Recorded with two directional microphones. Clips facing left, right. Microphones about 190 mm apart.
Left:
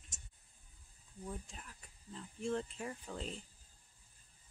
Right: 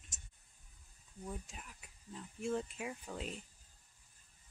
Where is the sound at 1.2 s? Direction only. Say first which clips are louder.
Even; 10° right (ahead or behind).